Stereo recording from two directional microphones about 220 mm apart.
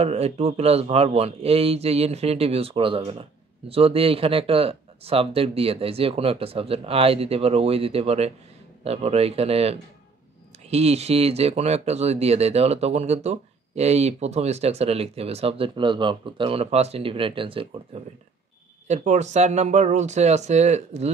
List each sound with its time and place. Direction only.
0.0 s speech: 30° right (ahead or behind)